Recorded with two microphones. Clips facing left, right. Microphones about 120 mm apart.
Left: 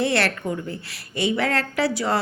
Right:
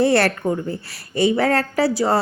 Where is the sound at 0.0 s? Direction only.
40° right (ahead or behind).